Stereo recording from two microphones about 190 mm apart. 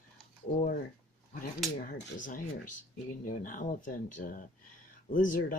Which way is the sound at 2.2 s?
45° left (ahead or behind).